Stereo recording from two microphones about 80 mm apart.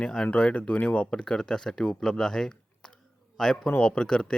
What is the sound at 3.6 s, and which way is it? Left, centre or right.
Speech, centre.